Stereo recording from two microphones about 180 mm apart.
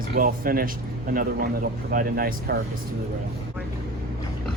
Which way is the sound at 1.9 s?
50° right (ahead or behind).